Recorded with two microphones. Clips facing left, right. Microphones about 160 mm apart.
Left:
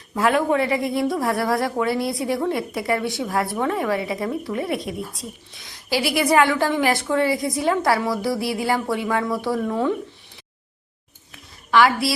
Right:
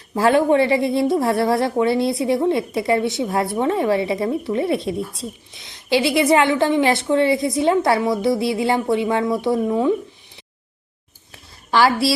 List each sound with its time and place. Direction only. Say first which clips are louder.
0.1 s a woman's voice: right 4 dB; 30° right (ahead or behind)
11.7 s a woman's voice: right 1 dB; 30° right (ahead or behind)